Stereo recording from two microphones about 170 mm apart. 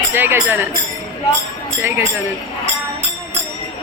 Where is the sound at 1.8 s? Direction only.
15° right (ahead or behind).